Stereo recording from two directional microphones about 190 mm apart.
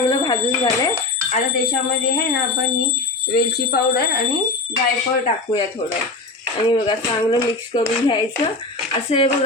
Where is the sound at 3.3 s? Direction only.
55° left (ahead or behind).